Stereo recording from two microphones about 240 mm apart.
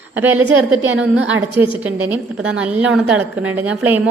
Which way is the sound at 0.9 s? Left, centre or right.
Right.